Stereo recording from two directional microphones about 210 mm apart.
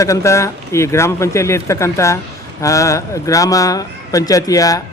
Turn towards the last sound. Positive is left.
turn(degrees=15)  # may be behind; listen again after turning